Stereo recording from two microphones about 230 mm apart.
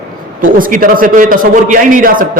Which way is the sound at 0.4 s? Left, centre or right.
Right.